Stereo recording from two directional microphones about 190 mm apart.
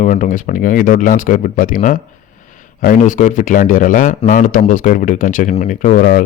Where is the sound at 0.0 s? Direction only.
40° left (ahead or behind).